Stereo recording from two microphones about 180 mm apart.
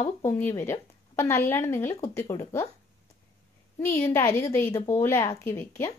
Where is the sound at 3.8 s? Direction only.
15° left (ahead or behind).